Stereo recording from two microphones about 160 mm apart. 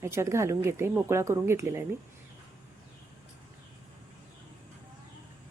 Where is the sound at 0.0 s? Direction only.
15° right (ahead or behind).